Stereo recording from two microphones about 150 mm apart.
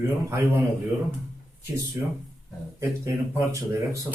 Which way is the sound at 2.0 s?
15° right (ahead or behind).